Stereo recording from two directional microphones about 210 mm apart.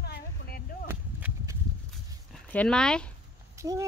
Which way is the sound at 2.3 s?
5° left (ahead or behind).